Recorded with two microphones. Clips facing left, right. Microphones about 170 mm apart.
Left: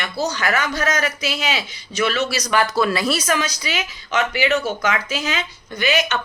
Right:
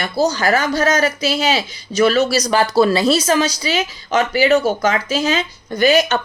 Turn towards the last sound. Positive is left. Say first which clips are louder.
# right 7 dB
turn(degrees=-35)  # may be behind; listen again after turning